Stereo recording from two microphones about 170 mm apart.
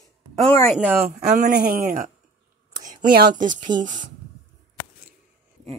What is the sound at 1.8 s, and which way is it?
Speech, 50° right (ahead or behind).